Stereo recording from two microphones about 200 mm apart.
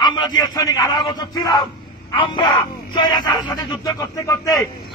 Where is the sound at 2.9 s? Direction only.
20° left (ahead or behind).